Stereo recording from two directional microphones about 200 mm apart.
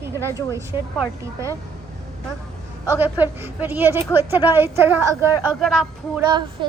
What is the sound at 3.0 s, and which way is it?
Speech, 10° right (ahead or behind).